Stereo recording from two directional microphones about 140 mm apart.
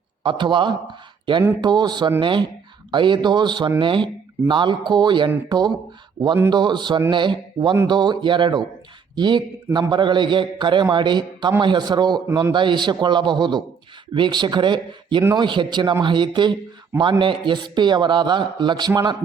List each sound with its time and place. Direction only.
0.2 s a man's voice: 35° right (ahead or behind)